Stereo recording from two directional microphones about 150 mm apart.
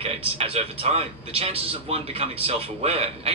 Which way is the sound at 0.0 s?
40° right (ahead or behind).